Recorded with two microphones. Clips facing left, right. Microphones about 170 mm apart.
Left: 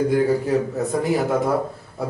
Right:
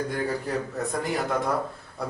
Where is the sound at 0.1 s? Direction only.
5° left (ahead or behind).